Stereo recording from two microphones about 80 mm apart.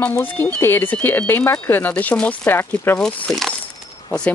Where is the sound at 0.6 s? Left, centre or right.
Left.